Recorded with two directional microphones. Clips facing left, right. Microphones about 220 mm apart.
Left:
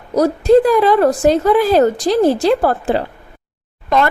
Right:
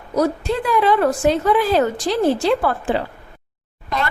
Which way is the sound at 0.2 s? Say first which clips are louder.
Left 9 dB; 40° left (ahead or behind).